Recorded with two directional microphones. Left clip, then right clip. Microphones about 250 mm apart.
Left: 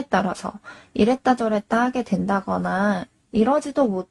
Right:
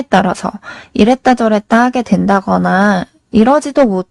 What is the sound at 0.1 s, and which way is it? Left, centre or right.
Speech, right.